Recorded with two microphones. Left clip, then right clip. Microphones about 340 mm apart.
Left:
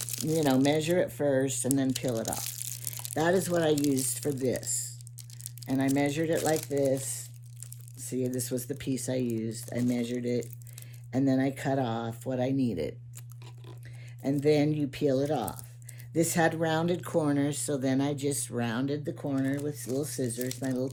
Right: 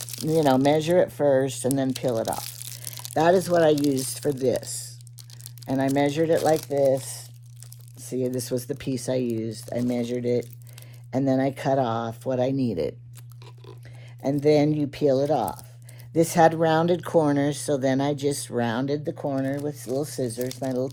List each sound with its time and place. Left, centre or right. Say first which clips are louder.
0.0 s a sound: right 2 dB; centre
0.3 s speech: right 6 dB; right
2.4 s crumpling: right 1 dB; centre
3.2 s speech: right 8 dB; right
7.9 s speech: right 5 dB; right
14.2 s speech: right 6 dB; right